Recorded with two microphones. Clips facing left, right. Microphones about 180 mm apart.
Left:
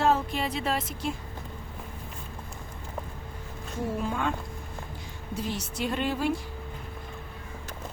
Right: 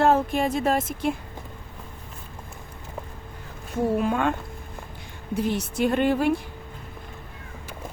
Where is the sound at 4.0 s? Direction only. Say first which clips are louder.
Right 4 dB; 65° right (ahead or behind).